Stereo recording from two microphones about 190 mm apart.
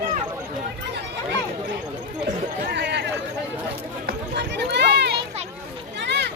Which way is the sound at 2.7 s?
60° right (ahead or behind).